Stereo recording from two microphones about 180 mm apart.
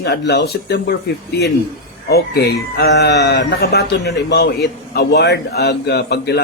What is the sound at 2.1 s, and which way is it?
A man's voice, 65° left (ahead or behind).